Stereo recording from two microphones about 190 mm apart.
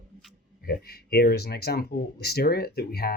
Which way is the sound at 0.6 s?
55° left (ahead or behind).